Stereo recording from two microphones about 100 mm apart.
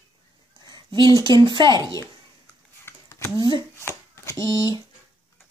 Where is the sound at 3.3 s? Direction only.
50° right (ahead or behind).